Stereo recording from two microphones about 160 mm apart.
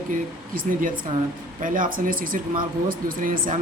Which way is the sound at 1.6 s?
55° right (ahead or behind).